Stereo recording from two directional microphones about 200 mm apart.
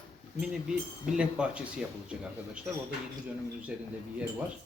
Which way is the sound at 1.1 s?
5° right (ahead or behind).